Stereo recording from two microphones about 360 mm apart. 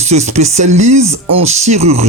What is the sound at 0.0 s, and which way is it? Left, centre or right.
Speech, centre.